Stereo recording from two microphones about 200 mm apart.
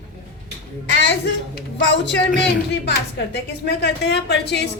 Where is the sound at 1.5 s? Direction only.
60° left (ahead or behind).